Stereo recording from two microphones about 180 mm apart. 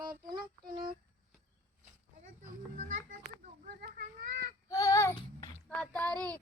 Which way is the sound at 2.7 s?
50° right (ahead or behind).